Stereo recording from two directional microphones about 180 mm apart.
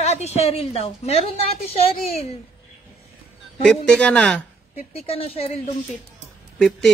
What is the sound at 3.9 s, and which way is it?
Speech, 5° left (ahead or behind).